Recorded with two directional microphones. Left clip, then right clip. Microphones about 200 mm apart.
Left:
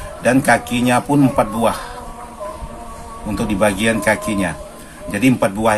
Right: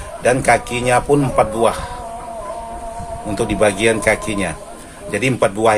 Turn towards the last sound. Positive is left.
turn(degrees=-20)  # may be behind; listen again after turning